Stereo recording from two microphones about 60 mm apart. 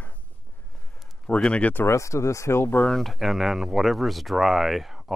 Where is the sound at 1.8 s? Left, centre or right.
Left.